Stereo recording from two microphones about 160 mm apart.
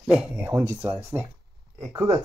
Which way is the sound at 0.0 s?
5° right (ahead or behind).